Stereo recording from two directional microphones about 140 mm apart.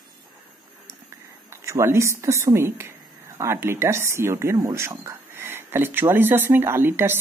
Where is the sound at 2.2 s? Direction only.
20° right (ahead or behind).